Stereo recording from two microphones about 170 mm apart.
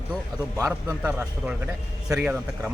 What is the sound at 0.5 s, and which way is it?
Speech, 20° right (ahead or behind).